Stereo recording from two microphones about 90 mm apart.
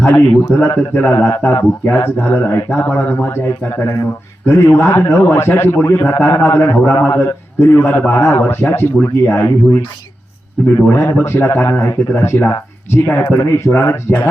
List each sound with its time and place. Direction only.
0.0 s speech: 15° left (ahead or behind)
10.8 s speech: 25° left (ahead or behind)